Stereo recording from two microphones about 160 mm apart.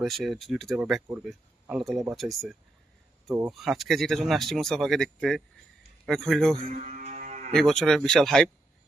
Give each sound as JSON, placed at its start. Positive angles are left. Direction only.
{"t": 0.0, "sound": "speech", "side_deg": 0}
{"t": 6.7, "sound": "music", "side_deg": -50}
{"t": 7.5, "sound": "speech", "side_deg": 5}